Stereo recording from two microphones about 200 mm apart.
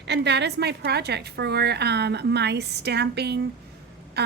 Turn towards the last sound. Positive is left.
turn(degrees=-55)  # may be behind; listen again after turning